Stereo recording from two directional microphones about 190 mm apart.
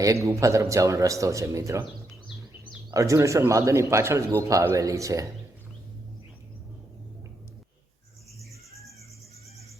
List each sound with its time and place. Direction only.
0.0 s a man's voice: 15° right (ahead or behind)
2.9 s a man's voice: 15° right (ahead or behind)